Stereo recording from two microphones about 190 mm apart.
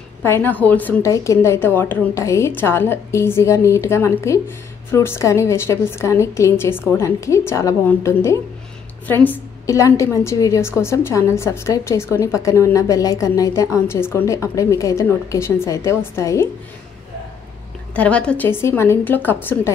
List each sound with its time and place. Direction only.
0.2 s a woman's voice: 10° left (ahead or behind)
17.9 s a woman's voice: 5° left (ahead or behind)